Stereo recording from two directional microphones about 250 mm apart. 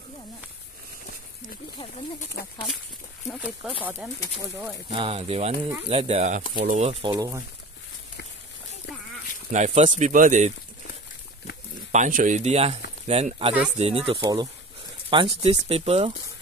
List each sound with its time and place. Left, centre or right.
3.3 s speech: centre
4.9 s speech: right
9.5 s speech: right
11.9 s speech: right